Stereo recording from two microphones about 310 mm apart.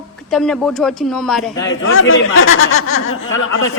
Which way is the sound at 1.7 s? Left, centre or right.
Left.